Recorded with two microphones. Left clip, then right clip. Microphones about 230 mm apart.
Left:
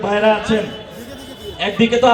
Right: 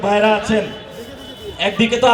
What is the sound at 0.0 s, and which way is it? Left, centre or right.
A man's voice, right.